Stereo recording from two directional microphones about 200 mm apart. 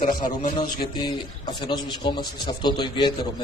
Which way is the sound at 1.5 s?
25° left (ahead or behind).